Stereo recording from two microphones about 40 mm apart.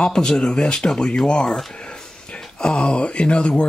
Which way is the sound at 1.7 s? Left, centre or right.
Left.